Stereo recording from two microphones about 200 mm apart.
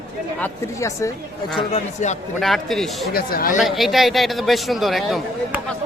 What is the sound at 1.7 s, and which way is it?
Speech, 35° left (ahead or behind).